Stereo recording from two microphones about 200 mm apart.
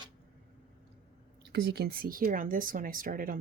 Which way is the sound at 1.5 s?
55° right (ahead or behind).